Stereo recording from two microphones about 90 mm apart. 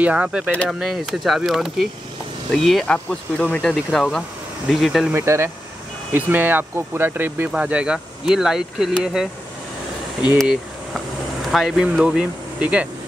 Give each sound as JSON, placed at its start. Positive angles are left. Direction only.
{"t": 0.0, "sound": "speech", "side_deg": -15}
{"t": 0.7, "sound": "speech", "side_deg": 0}
{"t": 5.1, "sound": "speech", "side_deg": -30}
{"t": 11.5, "sound": "speech", "side_deg": -5}